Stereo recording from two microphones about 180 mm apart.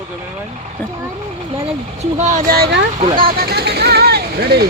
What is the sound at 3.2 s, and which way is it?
Speech, 60° right (ahead or behind).